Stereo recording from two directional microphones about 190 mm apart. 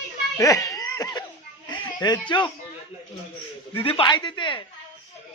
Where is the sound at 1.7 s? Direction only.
20° left (ahead or behind).